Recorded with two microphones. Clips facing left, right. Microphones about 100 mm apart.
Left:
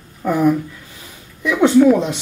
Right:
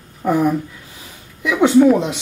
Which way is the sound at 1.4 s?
10° right (ahead or behind).